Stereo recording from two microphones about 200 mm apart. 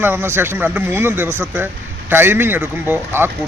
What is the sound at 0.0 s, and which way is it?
Speech, 10° right (ahead or behind).